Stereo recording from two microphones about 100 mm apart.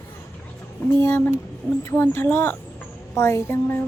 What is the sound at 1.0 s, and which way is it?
A child's voice, 20° left (ahead or behind).